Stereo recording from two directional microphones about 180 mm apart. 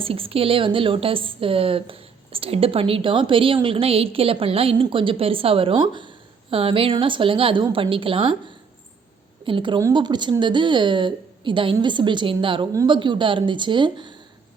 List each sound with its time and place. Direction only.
0.0 s a woman's voice: 30° right (ahead or behind)
9.5 s speech: 25° right (ahead or behind)